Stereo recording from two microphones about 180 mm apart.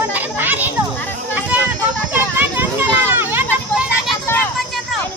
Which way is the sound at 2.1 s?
10° right (ahead or behind).